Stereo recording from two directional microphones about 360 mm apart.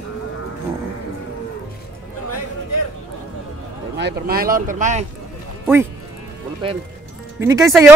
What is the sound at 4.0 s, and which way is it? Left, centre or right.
Speech, right.